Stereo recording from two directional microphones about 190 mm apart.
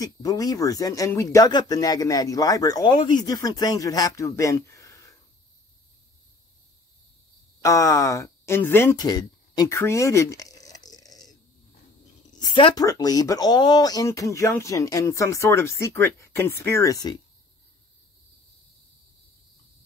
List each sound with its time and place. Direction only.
0.0 s speech: 20° left (ahead or behind)
7.6 s speech: 15° left (ahead or behind)
12.5 s speech: 25° left (ahead or behind)